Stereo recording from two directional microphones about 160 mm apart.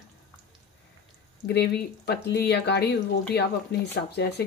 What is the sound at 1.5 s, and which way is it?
Speech, 90° left.